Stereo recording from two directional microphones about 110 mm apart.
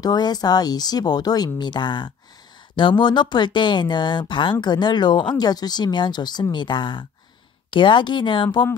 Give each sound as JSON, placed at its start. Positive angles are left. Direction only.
{"t": 0.0, "sound": "speech", "side_deg": 40}